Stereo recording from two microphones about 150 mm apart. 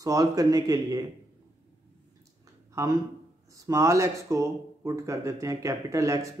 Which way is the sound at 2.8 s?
20° right (ahead or behind).